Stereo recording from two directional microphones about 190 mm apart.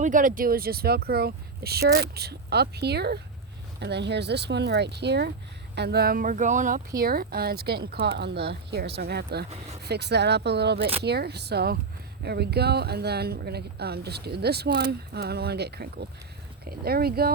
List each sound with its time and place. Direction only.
0.0 s speech: 45° right (ahead or behind); by 10.8 s 60° right (ahead or behind)
10.8 s speech: 30° right (ahead or behind)
11.0 s speech: 60° right (ahead or behind)